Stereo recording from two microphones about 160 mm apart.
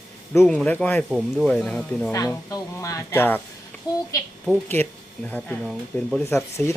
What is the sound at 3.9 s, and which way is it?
Speech, 25° left (ahead or behind).